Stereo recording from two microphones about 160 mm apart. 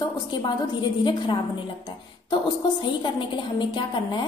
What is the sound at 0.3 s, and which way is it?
A woman's voice, 30° left (ahead or behind).